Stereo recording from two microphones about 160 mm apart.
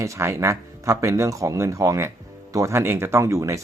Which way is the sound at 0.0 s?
20° right (ahead or behind).